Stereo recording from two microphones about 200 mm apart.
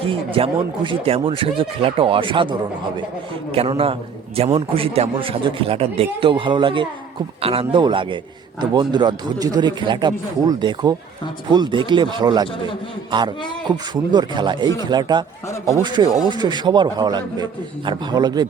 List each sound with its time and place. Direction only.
0.0 s speech: 30° right (ahead or behind)